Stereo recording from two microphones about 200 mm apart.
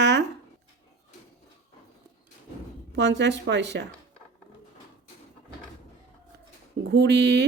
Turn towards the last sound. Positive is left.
turn(degrees=-55)  # may be behind; listen again after turning